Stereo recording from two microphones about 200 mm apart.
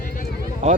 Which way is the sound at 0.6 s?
35° right (ahead or behind).